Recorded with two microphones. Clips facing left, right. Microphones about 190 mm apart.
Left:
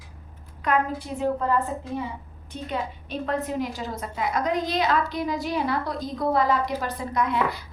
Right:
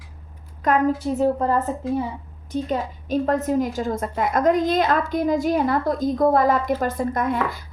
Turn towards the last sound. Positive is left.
turn(degrees=-50)  # may be behind; listen again after turning